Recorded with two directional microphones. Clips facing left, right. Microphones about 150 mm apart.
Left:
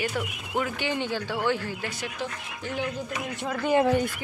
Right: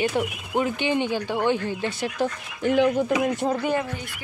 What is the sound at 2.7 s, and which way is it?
Speech, 90° right.